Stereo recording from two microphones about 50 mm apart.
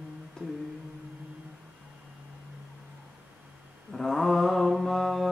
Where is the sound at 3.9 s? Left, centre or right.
Centre.